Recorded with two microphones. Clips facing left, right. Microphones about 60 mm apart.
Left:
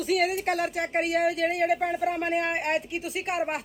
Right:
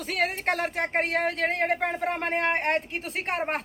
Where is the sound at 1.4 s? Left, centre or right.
Right.